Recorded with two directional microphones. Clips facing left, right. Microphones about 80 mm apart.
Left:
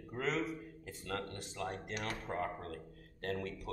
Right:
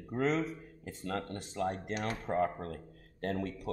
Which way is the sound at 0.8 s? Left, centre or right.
Right.